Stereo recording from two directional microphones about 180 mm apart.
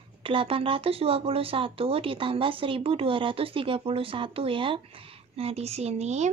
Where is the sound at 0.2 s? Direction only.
30° right (ahead or behind).